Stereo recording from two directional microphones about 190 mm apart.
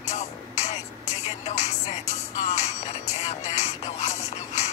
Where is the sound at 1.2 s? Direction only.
40° left (ahead or behind).